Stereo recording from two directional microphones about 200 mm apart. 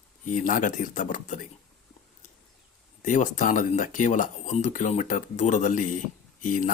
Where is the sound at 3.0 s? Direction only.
40° left (ahead or behind).